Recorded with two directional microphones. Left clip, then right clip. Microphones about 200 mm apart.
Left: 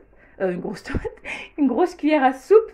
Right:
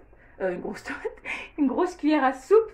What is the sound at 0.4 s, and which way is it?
A woman's voice, 45° left (ahead or behind).